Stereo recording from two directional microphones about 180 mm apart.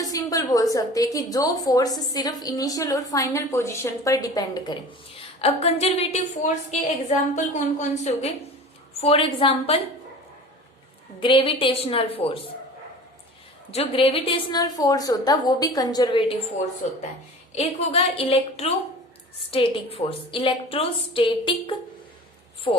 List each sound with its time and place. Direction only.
0.0 s a woman's voice: 20° left (ahead or behind)
5.4 s a woman's voice: 35° left (ahead or behind)
11.2 s a woman's voice: 30° left (ahead or behind)
13.7 s a woman's voice: 30° left (ahead or behind)
16.8 s a woman's voice: 40° left (ahead or behind)